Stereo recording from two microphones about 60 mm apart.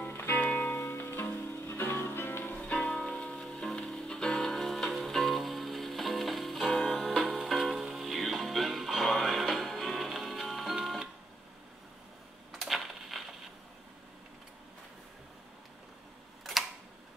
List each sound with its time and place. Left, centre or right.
0.0 s music: left
2.5 s music: centre
12.5 s a sound: centre
16.5 s camera: centre